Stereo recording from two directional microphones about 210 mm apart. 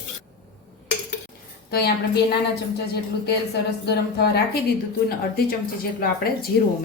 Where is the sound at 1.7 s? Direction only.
50° left (ahead or behind).